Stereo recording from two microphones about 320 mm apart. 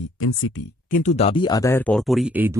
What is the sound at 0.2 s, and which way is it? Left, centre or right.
Speech, left.